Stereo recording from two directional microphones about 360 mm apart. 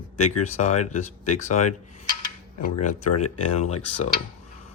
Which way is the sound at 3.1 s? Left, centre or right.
Left.